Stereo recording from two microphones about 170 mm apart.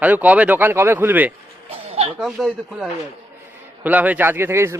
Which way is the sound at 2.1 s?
5° right (ahead or behind).